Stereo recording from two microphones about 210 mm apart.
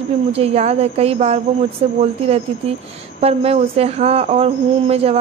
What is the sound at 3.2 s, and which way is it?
Speech, 30° right (ahead or behind).